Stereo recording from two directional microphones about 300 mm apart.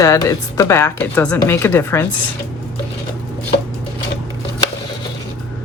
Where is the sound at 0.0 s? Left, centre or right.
Centre.